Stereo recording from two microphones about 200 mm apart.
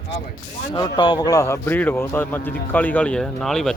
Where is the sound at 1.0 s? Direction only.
20° left (ahead or behind).